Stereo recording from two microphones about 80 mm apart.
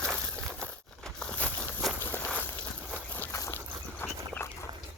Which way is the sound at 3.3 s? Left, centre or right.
Left.